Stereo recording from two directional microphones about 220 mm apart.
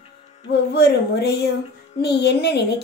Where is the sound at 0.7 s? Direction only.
45° left (ahead or behind).